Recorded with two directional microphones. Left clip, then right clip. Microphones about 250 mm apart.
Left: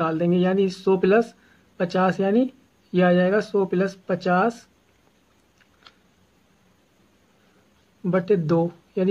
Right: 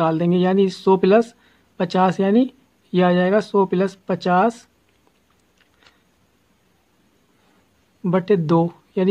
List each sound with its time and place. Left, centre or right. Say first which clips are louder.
0.0 s speech: right 3 dB; right
8.0 s speech: right 3 dB; right